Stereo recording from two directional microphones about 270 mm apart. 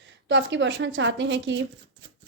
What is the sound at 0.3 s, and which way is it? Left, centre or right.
A woman's voice, right.